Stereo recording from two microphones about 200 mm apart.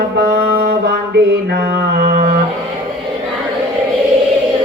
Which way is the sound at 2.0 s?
55° right (ahead or behind).